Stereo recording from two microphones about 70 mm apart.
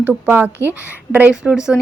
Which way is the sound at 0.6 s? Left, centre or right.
Right.